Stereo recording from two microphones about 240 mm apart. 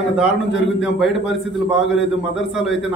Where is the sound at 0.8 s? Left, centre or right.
Centre.